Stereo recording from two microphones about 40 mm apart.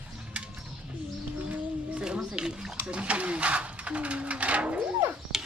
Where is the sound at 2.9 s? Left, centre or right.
Right.